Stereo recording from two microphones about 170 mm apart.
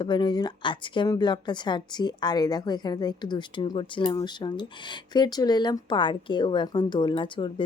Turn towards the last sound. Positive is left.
turn(degrees=30)  # may be behind; listen again after turning